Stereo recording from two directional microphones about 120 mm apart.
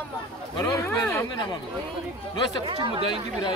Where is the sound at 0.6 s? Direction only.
30° left (ahead or behind).